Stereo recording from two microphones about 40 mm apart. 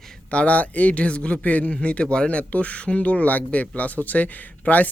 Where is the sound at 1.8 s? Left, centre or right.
Left.